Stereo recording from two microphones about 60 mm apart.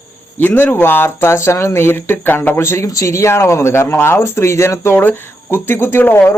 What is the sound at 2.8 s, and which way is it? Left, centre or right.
Speech, left.